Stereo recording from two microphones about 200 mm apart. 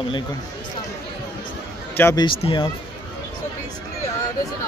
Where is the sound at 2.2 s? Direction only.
25° left (ahead or behind).